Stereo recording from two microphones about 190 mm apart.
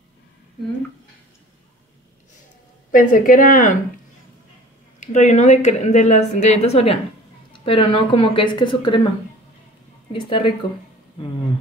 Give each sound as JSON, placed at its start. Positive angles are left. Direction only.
{"t": 2.9, "sound": "speech", "side_deg": 45}
{"t": 5.0, "sound": "a woman's voice", "side_deg": 40}
{"t": 10.1, "sound": "a woman's voice", "side_deg": 25}